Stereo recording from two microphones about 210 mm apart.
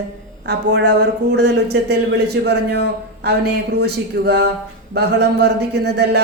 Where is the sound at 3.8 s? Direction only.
50° right (ahead or behind).